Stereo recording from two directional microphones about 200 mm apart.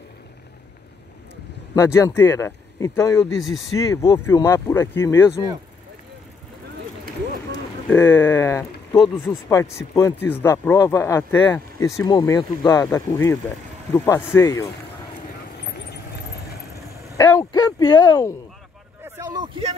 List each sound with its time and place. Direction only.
1.8 s speech: 15° left (ahead or behind)
3.3 s speech: centre (ahead or behind)
3.7 s speech: 15° left (ahead or behind)
7.9 s speech: 15° left (ahead or behind)
17.2 s a sound: 15° left (ahead or behind)
19.0 s a sound: 15° right (ahead or behind)